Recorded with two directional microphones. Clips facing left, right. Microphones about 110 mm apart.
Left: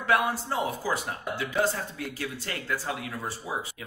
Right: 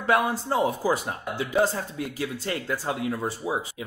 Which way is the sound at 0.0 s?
20° right (ahead or behind).